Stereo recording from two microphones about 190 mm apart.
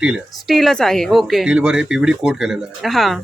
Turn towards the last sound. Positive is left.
turn(degrees=0)  # may be behind; listen again after turning